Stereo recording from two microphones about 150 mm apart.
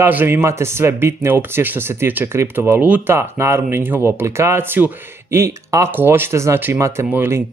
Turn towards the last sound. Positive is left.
turn(degrees=-15)  # may be behind; listen again after turning